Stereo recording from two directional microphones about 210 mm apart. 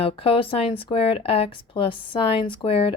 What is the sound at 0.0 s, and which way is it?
Speech, 25° left (ahead or behind).